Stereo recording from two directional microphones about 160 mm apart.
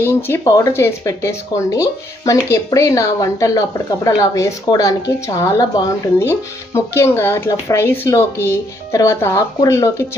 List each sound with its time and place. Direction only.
0.0 s speech: 15° left (ahead or behind)